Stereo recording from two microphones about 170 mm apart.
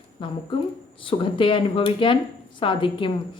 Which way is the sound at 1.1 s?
30° left (ahead or behind).